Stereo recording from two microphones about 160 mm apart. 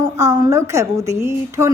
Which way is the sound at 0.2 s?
20° right (ahead or behind).